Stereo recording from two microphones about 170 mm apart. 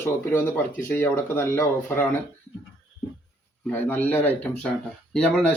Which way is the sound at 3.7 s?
10° left (ahead or behind).